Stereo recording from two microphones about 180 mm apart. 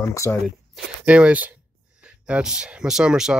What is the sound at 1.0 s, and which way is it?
Speech, 5° right (ahead or behind).